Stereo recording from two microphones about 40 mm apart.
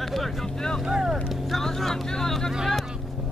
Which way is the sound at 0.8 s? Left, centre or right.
Centre.